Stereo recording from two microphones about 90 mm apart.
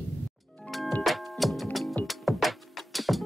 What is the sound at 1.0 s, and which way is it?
Music, centre (ahead or behind).